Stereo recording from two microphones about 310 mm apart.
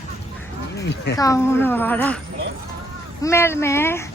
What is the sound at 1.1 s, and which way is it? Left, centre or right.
Speech, centre.